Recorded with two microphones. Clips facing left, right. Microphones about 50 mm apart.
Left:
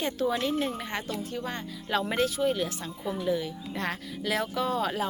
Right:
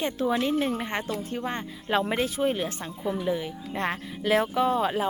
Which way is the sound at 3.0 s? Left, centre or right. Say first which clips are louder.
Right 1 dB; centre.